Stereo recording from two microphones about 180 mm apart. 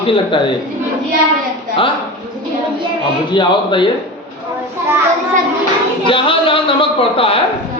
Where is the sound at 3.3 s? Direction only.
25° left (ahead or behind).